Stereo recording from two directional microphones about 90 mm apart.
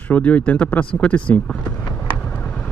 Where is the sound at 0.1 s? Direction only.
15° left (ahead or behind).